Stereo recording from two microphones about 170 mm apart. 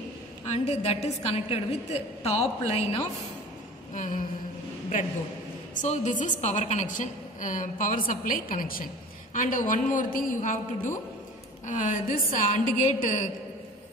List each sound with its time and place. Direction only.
0.5 s a woman's voice: 40° left (ahead or behind)
3.9 s a woman's voice: 50° left (ahead or behind)
5.8 s a woman's voice: 45° left (ahead or behind)